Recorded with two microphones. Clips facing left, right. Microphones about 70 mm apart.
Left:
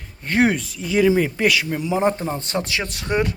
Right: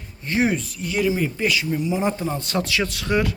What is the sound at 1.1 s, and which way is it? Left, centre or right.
Speech, left.